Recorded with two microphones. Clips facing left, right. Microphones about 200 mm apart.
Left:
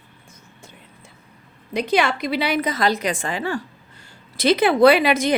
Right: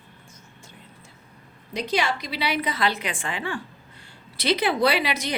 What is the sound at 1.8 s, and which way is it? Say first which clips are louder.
A woman's voice: left 5 dB; 55° left (ahead or behind).